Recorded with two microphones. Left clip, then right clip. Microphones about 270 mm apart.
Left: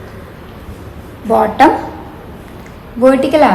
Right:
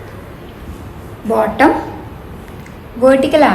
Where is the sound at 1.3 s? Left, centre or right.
Left.